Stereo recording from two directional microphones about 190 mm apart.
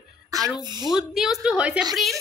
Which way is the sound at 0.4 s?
Centre (ahead or behind).